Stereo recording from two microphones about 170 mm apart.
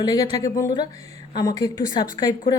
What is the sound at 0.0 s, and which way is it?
Speech, 25° left (ahead or behind).